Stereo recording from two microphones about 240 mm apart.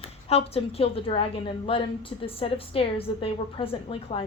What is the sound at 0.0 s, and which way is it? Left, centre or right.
A woman's voice, left.